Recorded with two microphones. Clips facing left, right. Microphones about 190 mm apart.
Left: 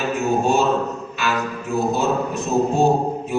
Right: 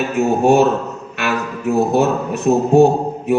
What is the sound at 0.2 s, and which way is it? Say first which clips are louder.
A man's voice: right 7 dB; 65° right (ahead or behind).